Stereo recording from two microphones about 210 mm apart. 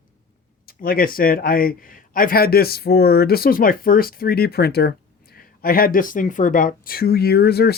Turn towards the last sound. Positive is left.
turn(degrees=50)  # may be behind; listen again after turning